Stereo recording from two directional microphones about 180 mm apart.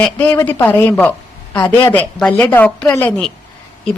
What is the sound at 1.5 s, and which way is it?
Speech, 25° left (ahead or behind).